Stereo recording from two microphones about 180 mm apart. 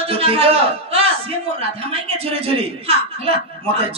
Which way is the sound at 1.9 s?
30° right (ahead or behind).